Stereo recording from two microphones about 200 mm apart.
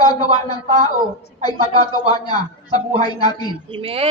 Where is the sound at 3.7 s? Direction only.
25° right (ahead or behind).